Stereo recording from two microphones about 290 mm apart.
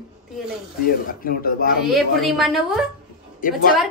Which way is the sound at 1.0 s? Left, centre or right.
Left.